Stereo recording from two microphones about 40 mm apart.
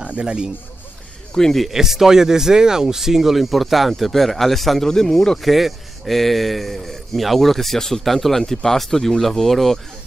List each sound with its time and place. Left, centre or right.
0.0 s speech: right
1.3 s speech: centre
1.7 s speech: centre
5.4 s a man's voice: centre